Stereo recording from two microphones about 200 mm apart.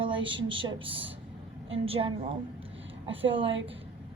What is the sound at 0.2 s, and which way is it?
Speech, 70° right (ahead or behind).